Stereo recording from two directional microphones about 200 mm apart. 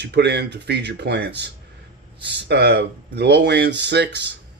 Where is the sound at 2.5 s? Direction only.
55° right (ahead or behind).